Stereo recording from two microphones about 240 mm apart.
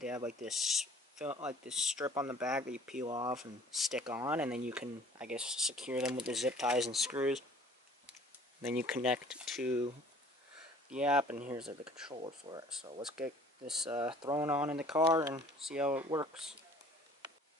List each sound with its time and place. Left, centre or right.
0.0 s speech: centre
3.1 s speech: centre
3.3 s speech: centre
4.0 s speech: centre
8.7 s speech: centre
10.9 s speech: centre
12.1 s speech: centre
13.0 s speech: centre